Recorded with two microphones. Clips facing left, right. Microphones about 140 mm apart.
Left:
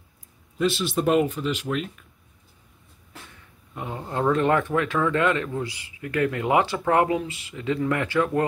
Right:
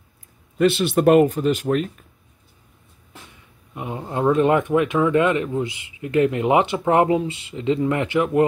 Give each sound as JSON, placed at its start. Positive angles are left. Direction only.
{"t": 0.6, "sound": "speech", "side_deg": -60}
{"t": 3.7, "sound": "speech", "side_deg": -20}